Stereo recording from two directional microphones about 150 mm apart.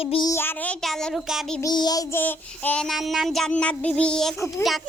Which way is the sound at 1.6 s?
25° left (ahead or behind).